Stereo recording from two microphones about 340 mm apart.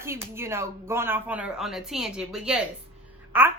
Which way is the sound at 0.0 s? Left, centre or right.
Centre.